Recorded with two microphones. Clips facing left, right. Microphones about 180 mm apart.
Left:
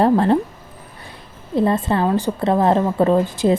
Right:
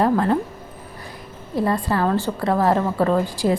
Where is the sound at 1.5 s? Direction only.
25° left (ahead or behind).